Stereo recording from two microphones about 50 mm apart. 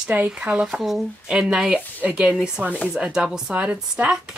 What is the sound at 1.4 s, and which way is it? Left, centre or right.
A woman's voice, centre.